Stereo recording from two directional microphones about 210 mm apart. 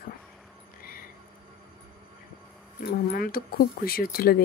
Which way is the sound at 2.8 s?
45° left (ahead or behind).